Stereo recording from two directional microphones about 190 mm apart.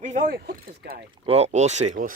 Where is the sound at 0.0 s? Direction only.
40° right (ahead or behind).